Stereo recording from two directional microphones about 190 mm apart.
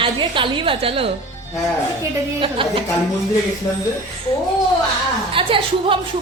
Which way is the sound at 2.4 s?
25° right (ahead or behind).